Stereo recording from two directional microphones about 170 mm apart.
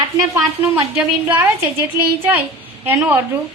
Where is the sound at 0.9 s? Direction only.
15° right (ahead or behind).